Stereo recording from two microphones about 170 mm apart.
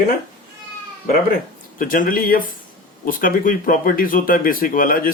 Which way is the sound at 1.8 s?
55° left (ahead or behind).